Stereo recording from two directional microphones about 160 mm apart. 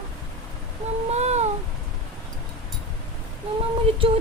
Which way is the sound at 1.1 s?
45° right (ahead or behind).